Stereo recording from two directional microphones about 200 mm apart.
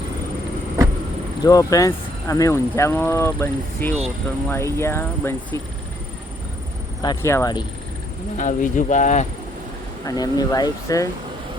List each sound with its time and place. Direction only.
1.5 s speech: 15° left (ahead or behind)
7.0 s speech: 20° left (ahead or behind)
8.4 s speech: 40° left (ahead or behind)
10.1 s speech: 20° left (ahead or behind)